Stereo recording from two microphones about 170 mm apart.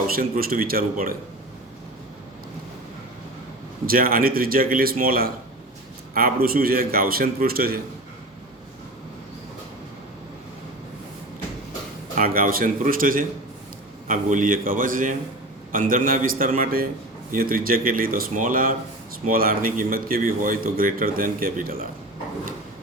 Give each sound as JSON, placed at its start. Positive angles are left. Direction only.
{"t": 0.1, "sound": "a man's voice", "side_deg": -60}
{"t": 3.8, "sound": "a man's voice", "side_deg": -60}
{"t": 12.1, "sound": "a man's voice", "side_deg": -55}